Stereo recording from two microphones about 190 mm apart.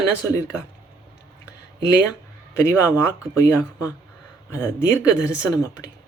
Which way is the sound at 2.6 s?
15° left (ahead or behind).